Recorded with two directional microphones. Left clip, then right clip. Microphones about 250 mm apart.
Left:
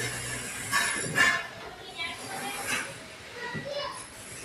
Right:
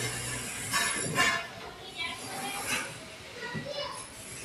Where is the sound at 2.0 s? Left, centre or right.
Centre.